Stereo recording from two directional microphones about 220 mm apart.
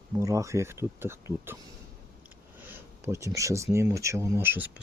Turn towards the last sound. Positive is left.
turn(degrees=-10)  # may be behind; listen again after turning